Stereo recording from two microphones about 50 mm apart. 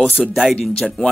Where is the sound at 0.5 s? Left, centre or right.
Centre.